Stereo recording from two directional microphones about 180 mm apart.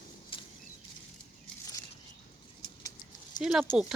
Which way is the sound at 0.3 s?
30° left (ahead or behind).